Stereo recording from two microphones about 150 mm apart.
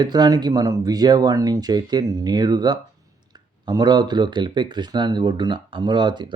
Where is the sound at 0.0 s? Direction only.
30° right (ahead or behind).